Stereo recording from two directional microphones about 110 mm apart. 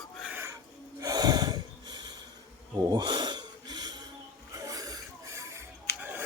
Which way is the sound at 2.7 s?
30° right (ahead or behind).